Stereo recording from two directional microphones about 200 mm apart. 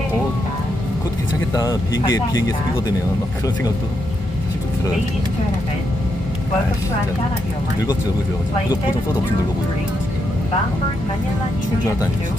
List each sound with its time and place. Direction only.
1.5 s speech: 20° left (ahead or behind)